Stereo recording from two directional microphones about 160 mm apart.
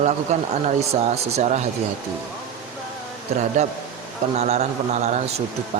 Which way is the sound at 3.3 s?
45° right (ahead or behind).